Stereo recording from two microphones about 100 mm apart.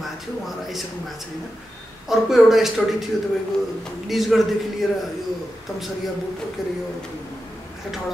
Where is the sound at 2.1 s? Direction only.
5° right (ahead or behind).